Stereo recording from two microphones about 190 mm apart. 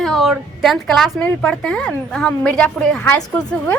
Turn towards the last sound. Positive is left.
turn(degrees=5)  # may be behind; listen again after turning